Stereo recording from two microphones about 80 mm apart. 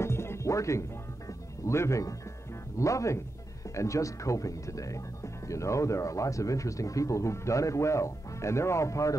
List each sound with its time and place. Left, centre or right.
0.0 s music: left
1.7 s speech: left